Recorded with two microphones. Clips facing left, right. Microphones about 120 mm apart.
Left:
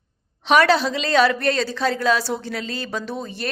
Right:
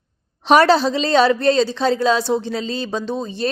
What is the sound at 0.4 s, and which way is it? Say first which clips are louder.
A woman's voice: right 4 dB; 35° right (ahead or behind).